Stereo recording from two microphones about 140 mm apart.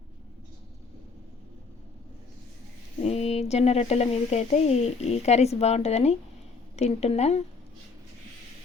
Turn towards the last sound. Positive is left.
turn(degrees=50)  # may be behind; listen again after turning